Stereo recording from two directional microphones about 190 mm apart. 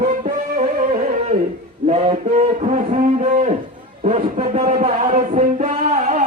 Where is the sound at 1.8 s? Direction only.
40° right (ahead or behind).